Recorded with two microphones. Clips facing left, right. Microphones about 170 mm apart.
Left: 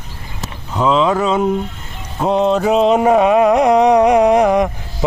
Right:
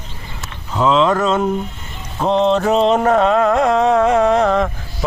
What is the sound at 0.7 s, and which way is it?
Speech, 5° left (ahead or behind).